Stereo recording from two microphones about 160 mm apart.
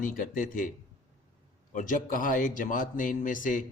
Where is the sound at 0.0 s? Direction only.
55° left (ahead or behind).